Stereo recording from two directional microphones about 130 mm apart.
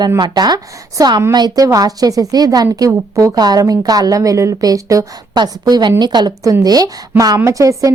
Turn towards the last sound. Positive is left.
turn(degrees=-25)  # may be behind; listen again after turning